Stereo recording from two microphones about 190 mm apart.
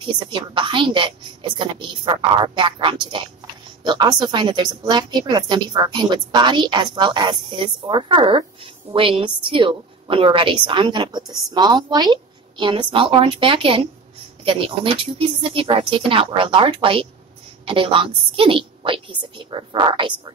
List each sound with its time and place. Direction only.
0.0 s a woman's voice: 25° right (ahead or behind)